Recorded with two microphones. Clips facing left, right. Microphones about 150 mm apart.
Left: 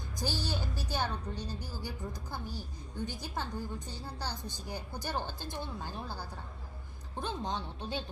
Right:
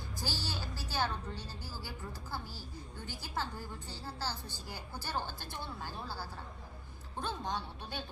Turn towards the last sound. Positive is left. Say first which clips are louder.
# left 3 dB
turn(degrees=20)  # may be behind; listen again after turning